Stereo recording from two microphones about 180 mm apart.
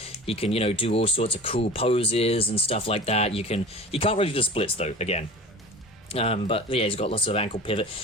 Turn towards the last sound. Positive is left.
turn(degrees=30)  # may be behind; listen again after turning